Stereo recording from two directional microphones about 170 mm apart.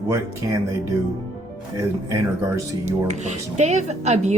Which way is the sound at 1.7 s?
20° right (ahead or behind).